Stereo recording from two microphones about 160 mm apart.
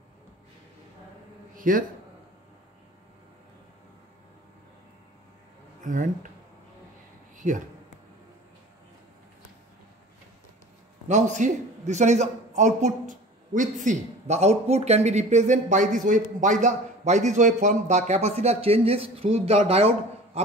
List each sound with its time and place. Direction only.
1.5 s a man's voice: 60° right (ahead or behind)
5.9 s speech: 55° right (ahead or behind)
7.3 s speech: 55° right (ahead or behind)
11.1 s a man's voice: 50° right (ahead or behind)